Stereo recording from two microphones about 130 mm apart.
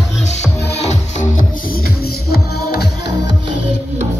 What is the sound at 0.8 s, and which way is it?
Music, 65° left (ahead or behind).